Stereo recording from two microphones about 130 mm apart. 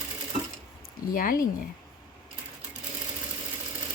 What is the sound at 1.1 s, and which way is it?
Speech, 90° left.